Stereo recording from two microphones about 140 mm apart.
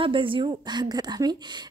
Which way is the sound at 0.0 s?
40° right (ahead or behind).